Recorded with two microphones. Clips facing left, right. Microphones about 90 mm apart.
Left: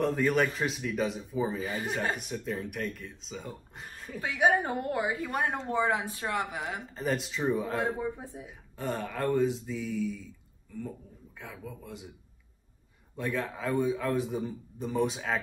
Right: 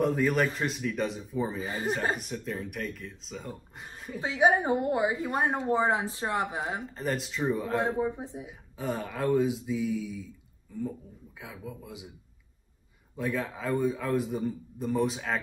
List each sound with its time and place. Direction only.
0.0 s a man's voice: centre (ahead or behind)
1.6 s speech: 30° right (ahead or behind)
2.1 s a man's voice: centre (ahead or behind)
4.2 s a woman's voice: 25° right (ahead or behind)
6.8 s a man's voice: centre (ahead or behind)
7.8 s a woman's voice: 20° right (ahead or behind)
8.5 s a man's voice: centre (ahead or behind)
13.1 s a man's voice: centre (ahead or behind)